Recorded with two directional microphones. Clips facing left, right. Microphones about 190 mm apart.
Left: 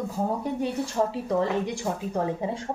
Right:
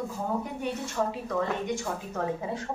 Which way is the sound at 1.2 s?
30° left (ahead or behind).